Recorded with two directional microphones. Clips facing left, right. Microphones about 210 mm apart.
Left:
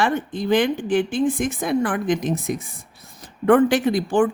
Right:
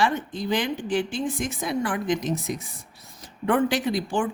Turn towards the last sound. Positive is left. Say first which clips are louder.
# left 6 dB
turn(degrees=55)  # may be behind; listen again after turning